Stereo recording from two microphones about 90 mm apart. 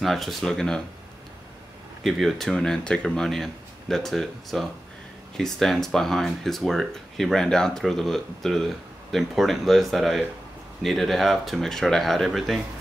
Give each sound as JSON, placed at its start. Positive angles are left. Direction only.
{"t": 0.0, "sound": "speech", "side_deg": 0}
{"t": 2.0, "sound": "speech", "side_deg": 0}